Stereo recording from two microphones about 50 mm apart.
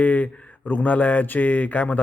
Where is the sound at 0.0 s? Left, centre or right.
Left.